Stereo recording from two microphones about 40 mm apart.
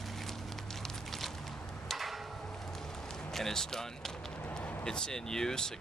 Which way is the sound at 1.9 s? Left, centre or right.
Centre.